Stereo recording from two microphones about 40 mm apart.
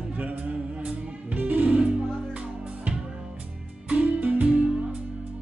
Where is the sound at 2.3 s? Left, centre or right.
Right.